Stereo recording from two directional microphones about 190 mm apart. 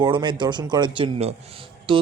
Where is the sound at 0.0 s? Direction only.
25° right (ahead or behind).